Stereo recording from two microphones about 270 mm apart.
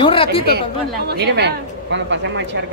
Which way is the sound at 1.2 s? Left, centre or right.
Right.